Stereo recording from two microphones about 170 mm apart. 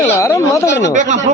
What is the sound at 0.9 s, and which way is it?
Speech, 45° right (ahead or behind).